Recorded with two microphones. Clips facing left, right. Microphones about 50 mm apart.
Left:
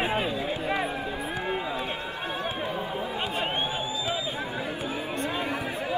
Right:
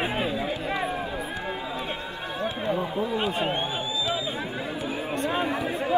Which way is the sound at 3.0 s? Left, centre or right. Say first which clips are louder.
Right 4 dB; centre.